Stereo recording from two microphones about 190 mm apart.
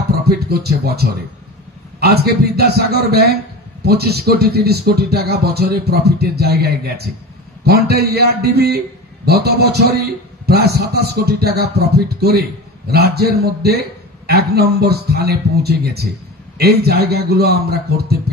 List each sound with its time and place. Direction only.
0.5 s a man's voice: 55° right (ahead or behind)